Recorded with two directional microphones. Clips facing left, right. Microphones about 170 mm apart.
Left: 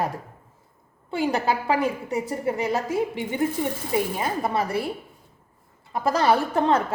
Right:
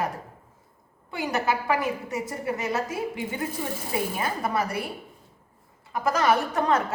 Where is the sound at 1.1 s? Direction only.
30° left (ahead or behind).